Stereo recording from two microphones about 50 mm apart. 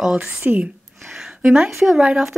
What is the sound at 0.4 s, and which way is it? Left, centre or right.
Speech, right.